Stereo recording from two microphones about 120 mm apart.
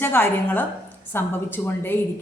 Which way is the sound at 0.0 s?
15° left (ahead or behind).